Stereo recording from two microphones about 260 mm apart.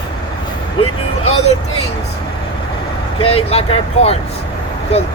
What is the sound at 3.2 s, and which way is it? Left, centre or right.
Speech, left.